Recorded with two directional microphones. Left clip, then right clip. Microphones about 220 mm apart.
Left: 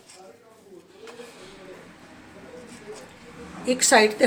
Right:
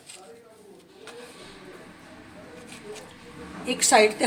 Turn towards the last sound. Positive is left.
turn(degrees=30)  # may be behind; listen again after turning